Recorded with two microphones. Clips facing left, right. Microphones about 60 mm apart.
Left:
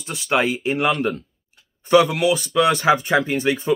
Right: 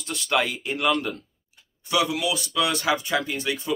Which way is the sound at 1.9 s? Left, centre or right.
Left.